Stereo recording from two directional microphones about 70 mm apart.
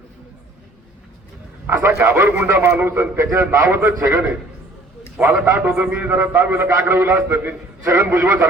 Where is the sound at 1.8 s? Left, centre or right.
Right.